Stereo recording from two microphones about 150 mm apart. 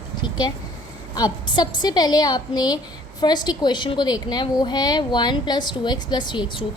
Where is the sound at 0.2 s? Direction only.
30° left (ahead or behind).